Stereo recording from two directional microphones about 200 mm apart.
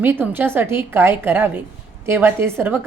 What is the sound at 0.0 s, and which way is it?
A woman's voice, 10° right (ahead or behind).